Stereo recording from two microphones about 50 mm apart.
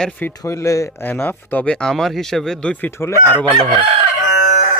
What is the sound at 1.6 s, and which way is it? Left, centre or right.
Speech, centre.